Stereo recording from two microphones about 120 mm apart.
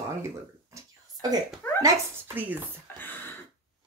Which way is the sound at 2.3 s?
15° right (ahead or behind).